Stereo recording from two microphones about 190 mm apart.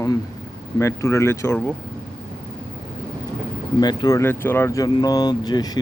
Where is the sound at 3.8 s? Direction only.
20° left (ahead or behind).